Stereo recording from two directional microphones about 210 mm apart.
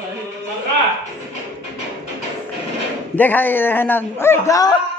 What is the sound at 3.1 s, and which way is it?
A man's voice, 10° left (ahead or behind).